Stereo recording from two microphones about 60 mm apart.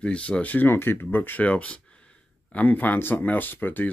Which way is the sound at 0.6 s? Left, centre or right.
Left.